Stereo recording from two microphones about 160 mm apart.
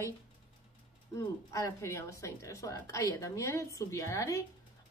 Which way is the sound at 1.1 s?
20° left (ahead or behind).